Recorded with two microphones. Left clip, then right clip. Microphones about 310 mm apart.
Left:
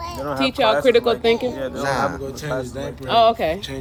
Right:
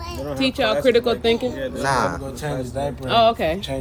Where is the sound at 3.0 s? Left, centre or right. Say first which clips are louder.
Left 1 dB; left.